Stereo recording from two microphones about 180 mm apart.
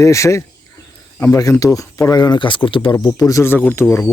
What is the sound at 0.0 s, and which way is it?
Speech, 15° left (ahead or behind).